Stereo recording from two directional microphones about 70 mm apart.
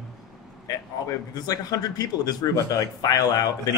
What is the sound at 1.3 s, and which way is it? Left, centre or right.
Speech, left.